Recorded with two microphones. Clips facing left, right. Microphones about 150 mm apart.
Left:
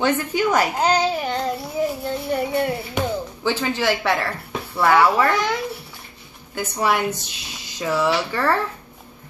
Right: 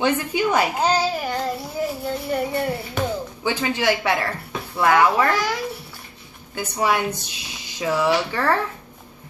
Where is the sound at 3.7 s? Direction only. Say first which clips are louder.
Right 1 dB; 15° right (ahead or behind).